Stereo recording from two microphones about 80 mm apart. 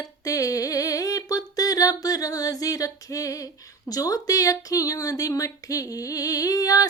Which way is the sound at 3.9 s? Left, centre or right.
Left.